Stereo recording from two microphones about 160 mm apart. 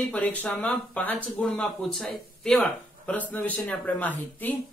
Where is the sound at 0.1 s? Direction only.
10° left (ahead or behind).